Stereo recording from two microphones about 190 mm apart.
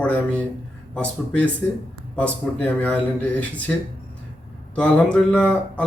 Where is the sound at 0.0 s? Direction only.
5° left (ahead or behind).